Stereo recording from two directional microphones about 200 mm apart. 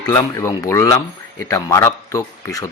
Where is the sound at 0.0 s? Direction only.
20° left (ahead or behind).